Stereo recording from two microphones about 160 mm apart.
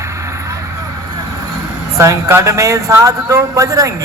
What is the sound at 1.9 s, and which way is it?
Speech, 20° right (ahead or behind).